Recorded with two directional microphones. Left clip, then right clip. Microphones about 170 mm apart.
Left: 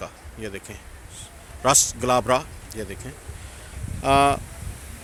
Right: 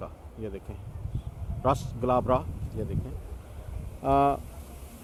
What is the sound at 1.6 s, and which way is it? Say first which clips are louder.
Speech: left 7 dB; 15° left (ahead or behind).